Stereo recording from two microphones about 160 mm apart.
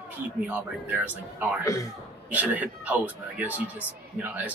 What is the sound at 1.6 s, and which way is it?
Speech, 20° left (ahead or behind).